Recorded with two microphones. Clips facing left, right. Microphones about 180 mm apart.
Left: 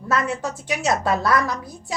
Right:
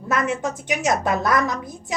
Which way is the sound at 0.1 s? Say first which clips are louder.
Right 1 dB; 20° right (ahead or behind).